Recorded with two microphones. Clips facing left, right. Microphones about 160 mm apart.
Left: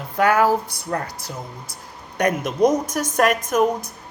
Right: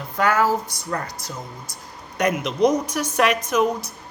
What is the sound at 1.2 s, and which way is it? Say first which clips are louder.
Speech: left 1 dB; 10° left (ahead or behind).